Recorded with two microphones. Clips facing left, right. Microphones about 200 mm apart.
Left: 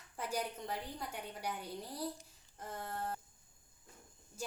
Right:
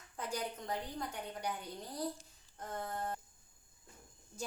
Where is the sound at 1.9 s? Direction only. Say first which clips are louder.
Right 2 dB; 10° left (ahead or behind).